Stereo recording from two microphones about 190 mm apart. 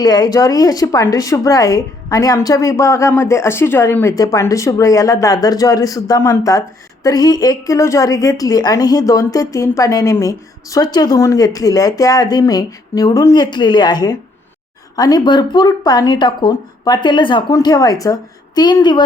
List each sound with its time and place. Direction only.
0.0 s speech: 20° left (ahead or behind)